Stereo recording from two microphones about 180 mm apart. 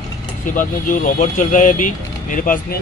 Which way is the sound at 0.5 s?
45° left (ahead or behind).